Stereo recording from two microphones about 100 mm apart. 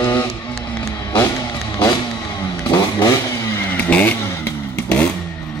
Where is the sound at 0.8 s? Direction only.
40° left (ahead or behind).